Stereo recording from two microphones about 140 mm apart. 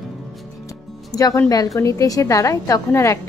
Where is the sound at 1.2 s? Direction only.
25° left (ahead or behind).